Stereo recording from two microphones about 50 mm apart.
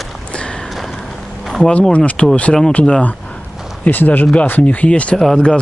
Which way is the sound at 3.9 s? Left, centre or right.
Left.